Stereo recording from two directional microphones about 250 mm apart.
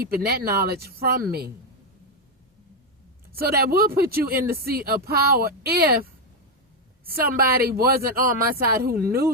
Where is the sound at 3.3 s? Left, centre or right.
Right.